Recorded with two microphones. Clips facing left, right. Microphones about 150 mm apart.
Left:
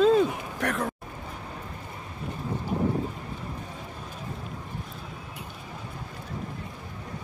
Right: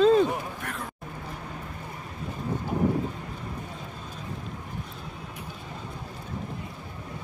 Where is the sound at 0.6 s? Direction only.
75° left (ahead or behind).